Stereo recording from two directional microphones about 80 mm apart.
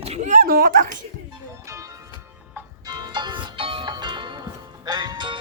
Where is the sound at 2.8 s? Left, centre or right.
Right.